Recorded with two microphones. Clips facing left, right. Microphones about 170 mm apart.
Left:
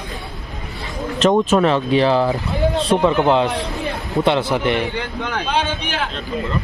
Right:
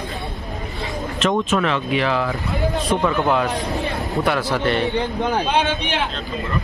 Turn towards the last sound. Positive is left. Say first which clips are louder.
# right 4 dB
turn(degrees=-35)  # may be behind; listen again after turning